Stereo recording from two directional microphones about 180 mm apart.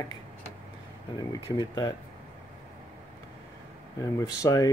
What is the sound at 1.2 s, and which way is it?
Speech, 20° left (ahead or behind).